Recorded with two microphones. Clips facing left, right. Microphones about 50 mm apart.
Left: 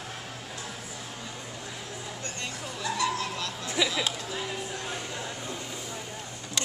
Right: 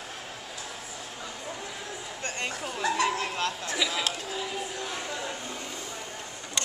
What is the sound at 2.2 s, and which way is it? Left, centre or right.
Speech, right.